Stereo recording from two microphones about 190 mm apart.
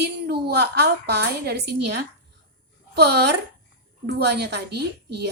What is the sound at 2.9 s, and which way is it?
A woman's voice, 60° right (ahead or behind).